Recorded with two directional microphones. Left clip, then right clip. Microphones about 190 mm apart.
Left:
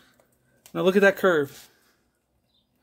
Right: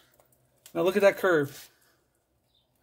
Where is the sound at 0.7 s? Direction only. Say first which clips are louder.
Left 3 dB; 50° left (ahead or behind).